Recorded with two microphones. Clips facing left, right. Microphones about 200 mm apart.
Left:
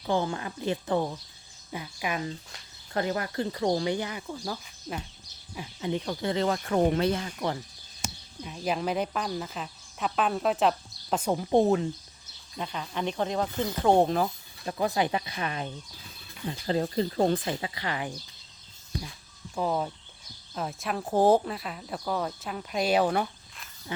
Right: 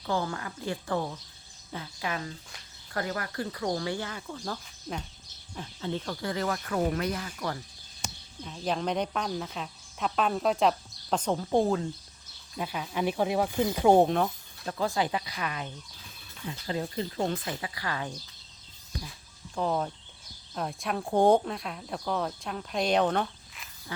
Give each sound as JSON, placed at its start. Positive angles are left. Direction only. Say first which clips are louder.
{"t": 0.0, "sound": "speech", "louder": "left 3 dB", "side_deg": 20}
{"t": 5.5, "sound": "speech", "louder": "left 3 dB", "side_deg": 15}
{"t": 8.0, "sound": "speech", "louder": "left 2 dB", "side_deg": 10}
{"t": 12.5, "sound": "speech", "louder": "right 2 dB", "side_deg": -5}
{"t": 14.8, "sound": "speech", "louder": "left 2 dB", "side_deg": 20}
{"t": 19.5, "sound": "speech", "louder": "left 1 dB", "side_deg": 5}